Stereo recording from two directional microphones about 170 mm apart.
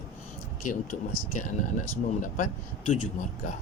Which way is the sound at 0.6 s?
50° left (ahead or behind).